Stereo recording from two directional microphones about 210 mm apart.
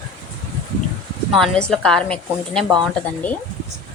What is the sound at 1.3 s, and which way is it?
A woman's voice, centre (ahead or behind).